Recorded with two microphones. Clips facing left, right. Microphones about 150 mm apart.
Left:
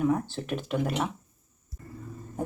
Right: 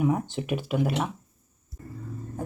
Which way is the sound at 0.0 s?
15° right (ahead or behind).